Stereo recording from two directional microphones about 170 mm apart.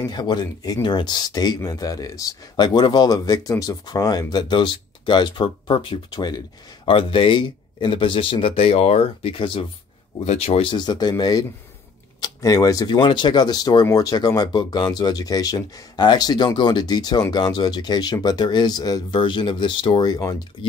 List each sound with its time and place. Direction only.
0.1 s a man's voice: 25° left (ahead or behind)